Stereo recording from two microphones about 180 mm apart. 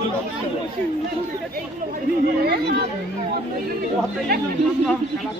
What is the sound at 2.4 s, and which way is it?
Speech, 65° right (ahead or behind).